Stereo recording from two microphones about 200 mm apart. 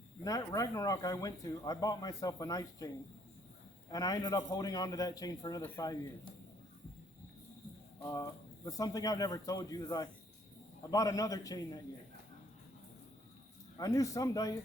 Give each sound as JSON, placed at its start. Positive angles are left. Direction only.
{"t": 0.3, "sound": "speech", "side_deg": 15}
{"t": 8.0, "sound": "speech", "side_deg": 15}
{"t": 13.7, "sound": "speech", "side_deg": 15}